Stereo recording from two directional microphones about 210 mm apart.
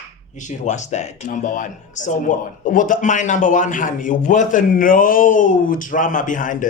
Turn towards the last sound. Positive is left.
turn(degrees=40)  # may be behind; listen again after turning